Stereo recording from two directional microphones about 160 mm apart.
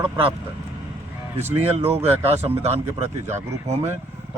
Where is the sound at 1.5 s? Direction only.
40° right (ahead or behind).